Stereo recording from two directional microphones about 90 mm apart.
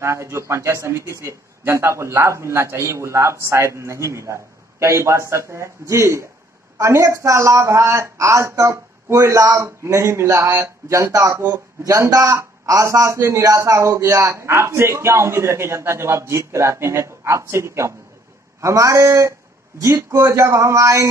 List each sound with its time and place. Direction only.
0.0 s speech: 30° right (ahead or behind)